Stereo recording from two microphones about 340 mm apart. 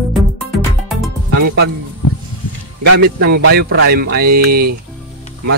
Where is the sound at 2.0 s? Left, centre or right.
Left.